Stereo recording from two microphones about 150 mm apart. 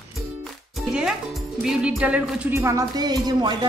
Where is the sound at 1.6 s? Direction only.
5° right (ahead or behind).